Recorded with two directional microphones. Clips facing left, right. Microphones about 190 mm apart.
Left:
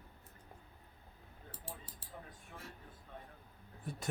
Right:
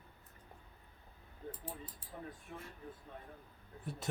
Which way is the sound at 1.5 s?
90° left.